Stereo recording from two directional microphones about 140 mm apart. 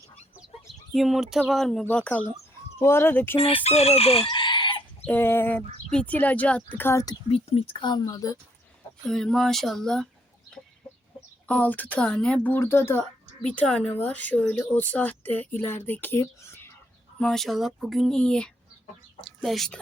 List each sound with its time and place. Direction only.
0.3 s chicken: centre (ahead or behind)
1.8 s speech: 10° left (ahead or behind)
3.3 s chicken: 45° left (ahead or behind)
5.0 s speech: 15° left (ahead or behind)
7.3 s speech: 45° left (ahead or behind); by 8.4 s 25° left (ahead or behind)
9.0 s speech: 5° left (ahead or behind)
11.4 s speech: 10° left (ahead or behind)
13.4 s speech: 5° left (ahead or behind)
17.2 s speech: 5° left (ahead or behind)